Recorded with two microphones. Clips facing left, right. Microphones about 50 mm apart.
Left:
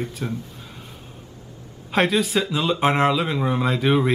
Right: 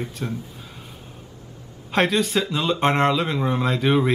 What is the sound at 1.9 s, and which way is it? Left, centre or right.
Speech, centre.